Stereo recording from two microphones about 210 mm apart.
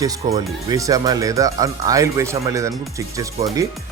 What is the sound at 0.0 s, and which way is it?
A man's voice, 15° right (ahead or behind).